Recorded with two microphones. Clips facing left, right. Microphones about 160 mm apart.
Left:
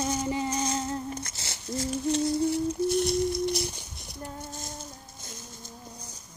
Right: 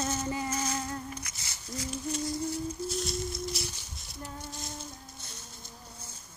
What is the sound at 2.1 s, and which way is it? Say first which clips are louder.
Humming: left 8 dB; 70° left (ahead or behind).